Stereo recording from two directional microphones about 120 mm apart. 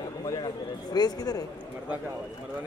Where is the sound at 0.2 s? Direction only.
30° left (ahead or behind).